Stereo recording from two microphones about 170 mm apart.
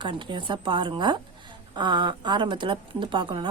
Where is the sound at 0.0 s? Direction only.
30° right (ahead or behind).